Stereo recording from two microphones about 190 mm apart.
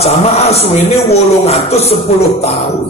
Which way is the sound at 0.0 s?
35° left (ahead or behind).